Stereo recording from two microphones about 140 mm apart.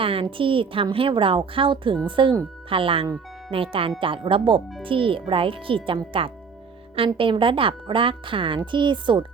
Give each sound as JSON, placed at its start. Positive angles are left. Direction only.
{"t": 0.0, "sound": "speech", "side_deg": -40}